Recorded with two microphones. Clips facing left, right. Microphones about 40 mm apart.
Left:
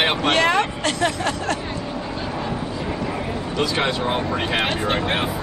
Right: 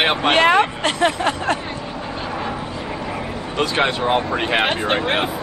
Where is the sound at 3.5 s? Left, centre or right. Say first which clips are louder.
Right 3 dB; right.